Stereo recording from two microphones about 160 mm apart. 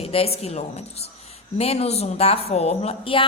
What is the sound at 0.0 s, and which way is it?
A woman's voice, 35° left (ahead or behind).